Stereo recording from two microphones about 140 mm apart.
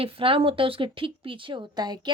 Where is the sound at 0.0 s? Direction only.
40° right (ahead or behind).